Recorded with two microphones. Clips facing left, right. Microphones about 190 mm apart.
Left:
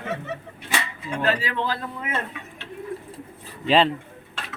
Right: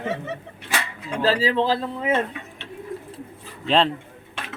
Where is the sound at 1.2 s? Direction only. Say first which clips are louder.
Right 5 dB; 30° right (ahead or behind).